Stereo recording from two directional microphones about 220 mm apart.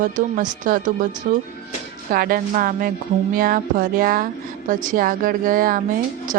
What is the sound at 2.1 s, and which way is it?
Speech, 40° right (ahead or behind).